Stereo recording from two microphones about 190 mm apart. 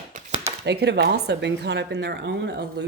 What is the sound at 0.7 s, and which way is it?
Speech, 60° right (ahead or behind).